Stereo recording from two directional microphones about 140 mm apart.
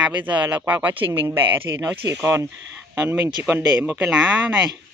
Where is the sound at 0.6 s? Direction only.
15° right (ahead or behind).